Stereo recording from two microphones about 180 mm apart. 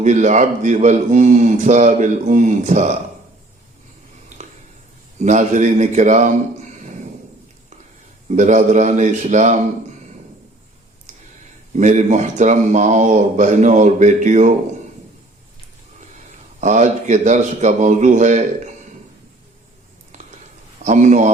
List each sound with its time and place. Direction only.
0.0 s speech: 40° right (ahead or behind)
5.2 s a man's voice: 40° right (ahead or behind)
8.3 s speech: 40° right (ahead or behind)
11.7 s speech: 40° right (ahead or behind)
16.0 s a man's voice: 40° right (ahead or behind)
20.8 s speech: 40° right (ahead or behind)